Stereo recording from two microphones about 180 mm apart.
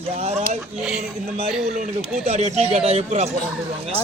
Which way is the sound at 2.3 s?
35° right (ahead or behind).